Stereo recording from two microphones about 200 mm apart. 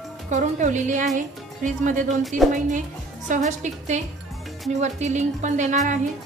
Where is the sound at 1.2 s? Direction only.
40° right (ahead or behind).